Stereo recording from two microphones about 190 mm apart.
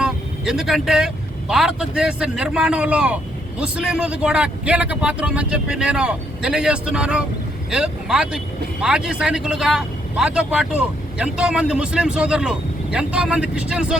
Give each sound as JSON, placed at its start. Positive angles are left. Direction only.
{"t": 0.0, "sound": "speech", "side_deg": -5}